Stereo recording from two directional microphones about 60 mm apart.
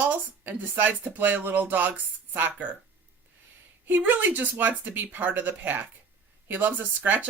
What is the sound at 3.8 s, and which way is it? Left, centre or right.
A woman's voice, right.